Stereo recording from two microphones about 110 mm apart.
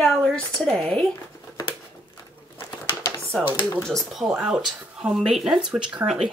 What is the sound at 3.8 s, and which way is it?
Speech, centre (ahead or behind).